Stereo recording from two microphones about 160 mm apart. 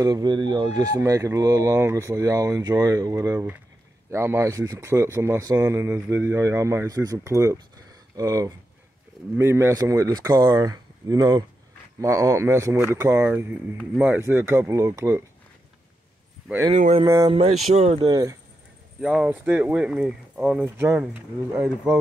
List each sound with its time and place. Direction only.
0.0 s speech: 25° right (ahead or behind)
16.7 s speech: 45° right (ahead or behind)
17.0 s speech: 20° right (ahead or behind)
17.3 s speech: 40° right (ahead or behind)
18.9 s speech: 5° right (ahead or behind)